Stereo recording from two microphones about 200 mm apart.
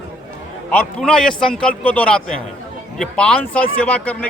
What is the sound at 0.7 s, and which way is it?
Speech, 5° left (ahead or behind).